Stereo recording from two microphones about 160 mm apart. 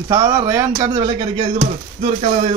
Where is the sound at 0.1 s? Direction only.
20° right (ahead or behind).